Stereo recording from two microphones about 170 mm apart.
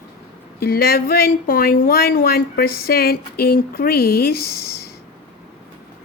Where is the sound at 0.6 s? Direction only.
65° left (ahead or behind).